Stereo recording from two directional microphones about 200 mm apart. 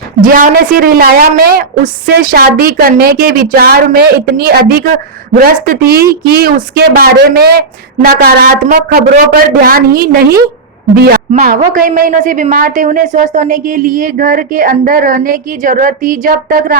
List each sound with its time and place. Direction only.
0.3 s a woman's voice: 40° right (ahead or behind)
11.4 s a woman's voice: 40° right (ahead or behind)